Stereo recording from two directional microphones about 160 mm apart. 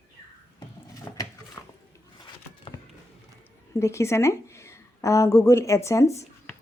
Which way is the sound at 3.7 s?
15° left (ahead or behind).